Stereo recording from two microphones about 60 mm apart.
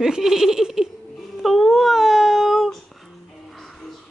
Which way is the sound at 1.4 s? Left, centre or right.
Centre.